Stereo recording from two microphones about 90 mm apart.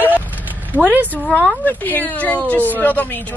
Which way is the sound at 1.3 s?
10° left (ahead or behind).